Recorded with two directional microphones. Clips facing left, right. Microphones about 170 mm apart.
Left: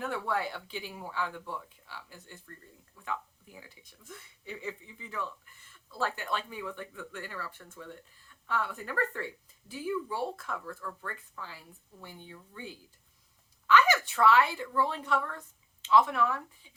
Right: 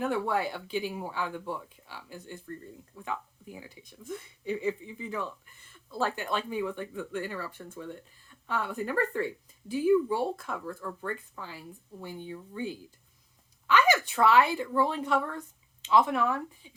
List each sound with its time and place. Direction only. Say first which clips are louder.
0.0 s speech: right 4 dB; 15° right (ahead or behind)